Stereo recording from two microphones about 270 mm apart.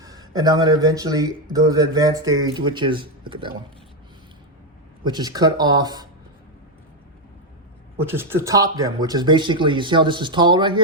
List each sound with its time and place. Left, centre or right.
0.0 s a man's voice: centre
5.0 s a man's voice: centre
7.9 s a man's voice: centre